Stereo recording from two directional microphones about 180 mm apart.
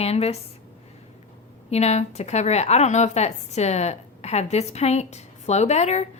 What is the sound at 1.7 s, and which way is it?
Speech, 35° left (ahead or behind).